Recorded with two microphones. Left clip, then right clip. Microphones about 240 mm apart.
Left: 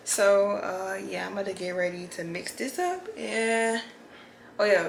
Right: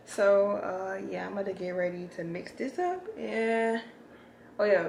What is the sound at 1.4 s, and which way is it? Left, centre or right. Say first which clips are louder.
Speech: left 2 dB; centre.